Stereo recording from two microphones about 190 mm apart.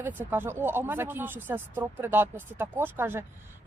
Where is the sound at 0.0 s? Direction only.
10° right (ahead or behind).